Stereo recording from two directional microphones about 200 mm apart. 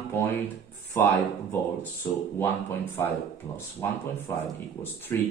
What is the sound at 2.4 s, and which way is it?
Speech, 10° left (ahead or behind).